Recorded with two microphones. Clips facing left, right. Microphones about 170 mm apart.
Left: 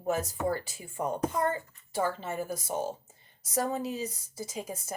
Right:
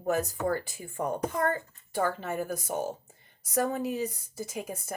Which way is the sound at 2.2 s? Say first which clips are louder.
Right 2 dB; 55° right (ahead or behind).